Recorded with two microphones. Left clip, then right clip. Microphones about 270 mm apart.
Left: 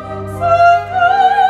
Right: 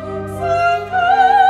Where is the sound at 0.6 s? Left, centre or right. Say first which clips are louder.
Left 6 dB; centre.